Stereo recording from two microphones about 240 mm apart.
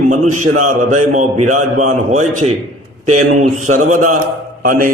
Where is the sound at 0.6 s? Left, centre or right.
Right.